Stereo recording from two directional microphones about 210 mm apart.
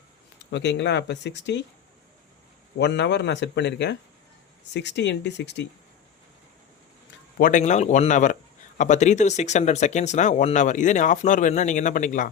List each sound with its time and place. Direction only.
0.5 s speech: 55° left (ahead or behind)
2.7 s speech: 55° left (ahead or behind)
7.3 s speech: 40° left (ahead or behind)